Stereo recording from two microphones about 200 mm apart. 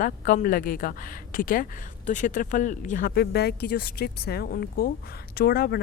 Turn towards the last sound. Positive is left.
turn(degrees=50)  # may be behind; listen again after turning